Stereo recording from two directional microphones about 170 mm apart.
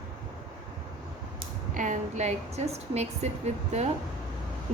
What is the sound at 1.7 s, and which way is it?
A woman's voice, 45° right (ahead or behind).